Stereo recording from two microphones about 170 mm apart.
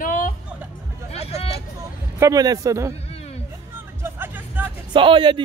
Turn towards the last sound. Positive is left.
turn(degrees=-30)  # may be behind; listen again after turning